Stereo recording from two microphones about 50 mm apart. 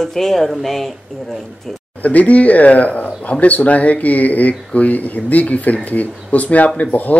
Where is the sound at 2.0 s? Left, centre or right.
Left.